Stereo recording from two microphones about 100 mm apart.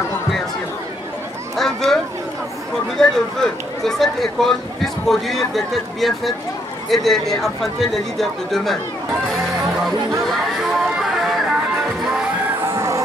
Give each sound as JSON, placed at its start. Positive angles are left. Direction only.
{"t": 1.6, "sound": "a sound", "side_deg": 5}
{"t": 3.0, "sound": "speech", "side_deg": 5}
{"t": 10.7, "sound": "music", "side_deg": 0}
{"t": 12.6, "sound": "music", "side_deg": -25}